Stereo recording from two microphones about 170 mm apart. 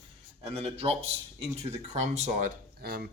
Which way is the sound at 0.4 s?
35° right (ahead or behind).